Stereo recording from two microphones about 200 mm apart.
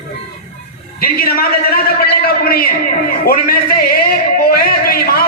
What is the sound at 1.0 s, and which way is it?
A man's voice, 45° left (ahead or behind).